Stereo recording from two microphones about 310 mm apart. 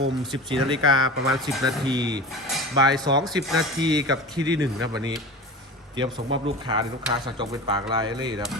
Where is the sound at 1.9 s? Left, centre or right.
Centre.